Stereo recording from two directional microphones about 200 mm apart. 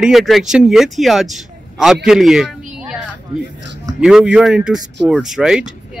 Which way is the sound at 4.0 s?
Centre (ahead or behind).